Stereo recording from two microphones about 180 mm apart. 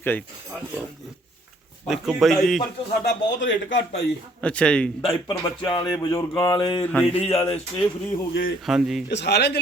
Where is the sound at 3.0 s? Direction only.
80° left.